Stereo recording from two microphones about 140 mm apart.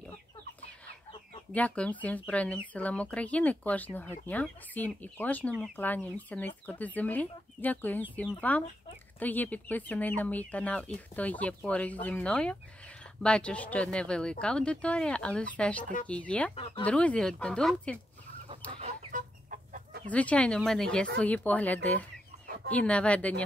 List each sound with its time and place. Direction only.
1.5 s speech: 10° left (ahead or behind)
18.5 s chicken: 40° right (ahead or behind)
19.1 s chicken: 70° right (ahead or behind)
20.1 s speech: 10° left (ahead or behind)